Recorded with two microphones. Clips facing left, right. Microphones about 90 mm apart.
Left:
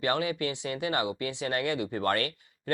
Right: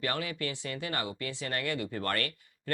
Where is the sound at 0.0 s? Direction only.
20° left (ahead or behind).